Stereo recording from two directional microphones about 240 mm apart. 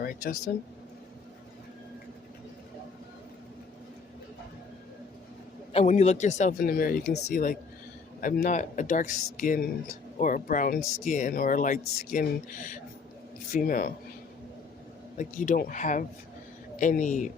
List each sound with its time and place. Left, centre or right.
0.0 s speech: left
5.7 s speech: left
15.2 s speech: left